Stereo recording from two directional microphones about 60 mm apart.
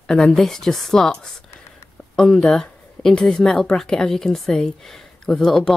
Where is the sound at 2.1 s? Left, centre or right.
Centre.